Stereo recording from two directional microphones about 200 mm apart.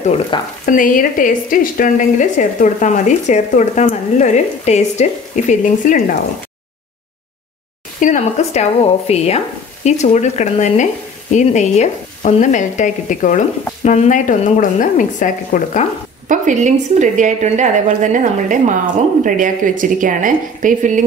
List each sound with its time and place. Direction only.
0.3 s speech: 25° left (ahead or behind)
0.7 s a woman's voice: 40° left (ahead or behind)
8.0 s a woman's voice: 35° left (ahead or behind)
16.3 s a woman's voice: 40° right (ahead or behind)